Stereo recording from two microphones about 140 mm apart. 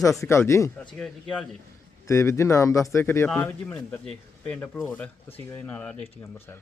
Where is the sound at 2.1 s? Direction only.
20° left (ahead or behind).